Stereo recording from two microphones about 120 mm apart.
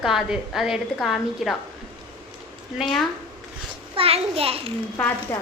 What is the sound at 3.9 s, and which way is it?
Speech, 55° right (ahead or behind).